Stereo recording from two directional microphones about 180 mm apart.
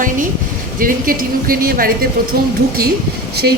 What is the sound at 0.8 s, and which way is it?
A woman's voice, 50° right (ahead or behind).